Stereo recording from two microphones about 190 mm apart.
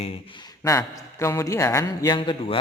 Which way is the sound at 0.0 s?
30° left (ahead or behind).